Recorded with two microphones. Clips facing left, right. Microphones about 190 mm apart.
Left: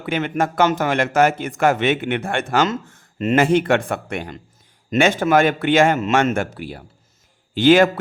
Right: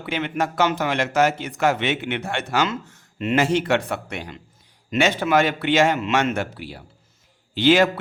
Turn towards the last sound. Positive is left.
turn(degrees=50)  # may be behind; listen again after turning